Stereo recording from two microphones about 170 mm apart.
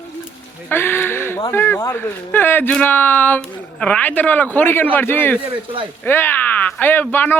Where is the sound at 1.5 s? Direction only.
15° left (ahead or behind).